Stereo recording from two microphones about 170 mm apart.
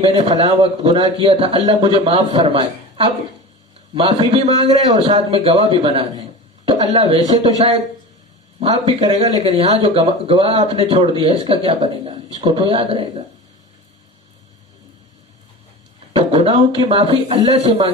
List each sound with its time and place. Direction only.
0.0 s speech: 35° right (ahead or behind)
16.1 s speech: 35° right (ahead or behind)